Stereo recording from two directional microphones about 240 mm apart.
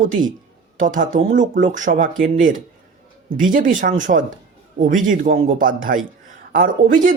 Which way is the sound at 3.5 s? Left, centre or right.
Right.